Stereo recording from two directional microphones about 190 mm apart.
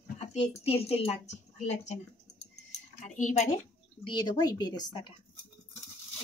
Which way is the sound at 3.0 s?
40° left (ahead or behind).